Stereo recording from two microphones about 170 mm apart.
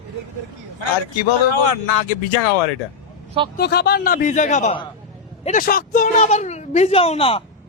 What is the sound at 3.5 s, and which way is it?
A woman's voice, 70° left (ahead or behind).